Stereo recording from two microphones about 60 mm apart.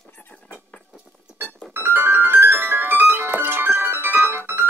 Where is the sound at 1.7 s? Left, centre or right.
Right.